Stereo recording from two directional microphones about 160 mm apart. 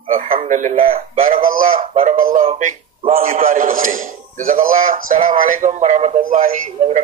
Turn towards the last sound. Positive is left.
turn(degrees=-55)  # may be behind; listen again after turning